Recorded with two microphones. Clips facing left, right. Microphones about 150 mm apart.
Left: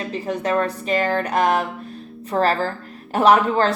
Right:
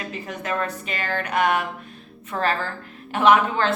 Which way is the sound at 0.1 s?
35° left (ahead or behind).